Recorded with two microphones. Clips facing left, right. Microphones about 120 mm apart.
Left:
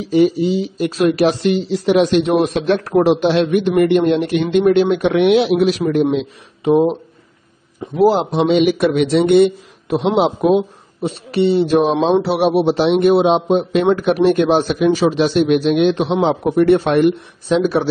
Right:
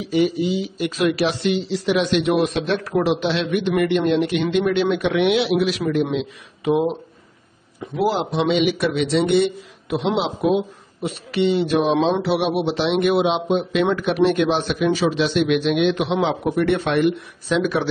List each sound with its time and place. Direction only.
0.0 s speech: 40° left (ahead or behind)
6.6 s speech: 30° left (ahead or behind); by 10.6 s 50° left (ahead or behind)
11.0 s speech: 30° left (ahead or behind)